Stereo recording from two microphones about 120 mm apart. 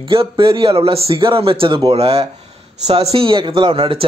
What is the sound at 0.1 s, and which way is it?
Speech, 50° right (ahead or behind).